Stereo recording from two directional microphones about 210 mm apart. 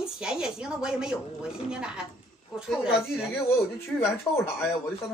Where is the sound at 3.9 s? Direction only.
10° left (ahead or behind).